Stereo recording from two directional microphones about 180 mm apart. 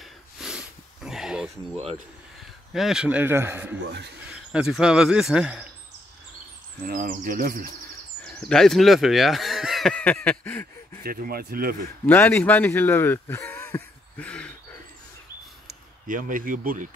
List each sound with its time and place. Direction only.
0.4 s a sound: 5° right (ahead or behind)
2.7 s speech: centre (ahead or behind)
6.8 s speech: 50° right (ahead or behind)
8.4 s speech: 5° left (ahead or behind)
11.1 s speech: 55° right (ahead or behind)
12.1 s speech: 10° left (ahead or behind)
15.6 s speech: 50° right (ahead or behind)